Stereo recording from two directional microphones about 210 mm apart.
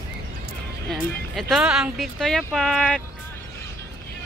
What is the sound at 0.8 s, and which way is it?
Speech, centre (ahead or behind).